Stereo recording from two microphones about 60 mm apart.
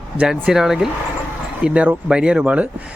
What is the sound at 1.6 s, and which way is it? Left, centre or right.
Speech, centre.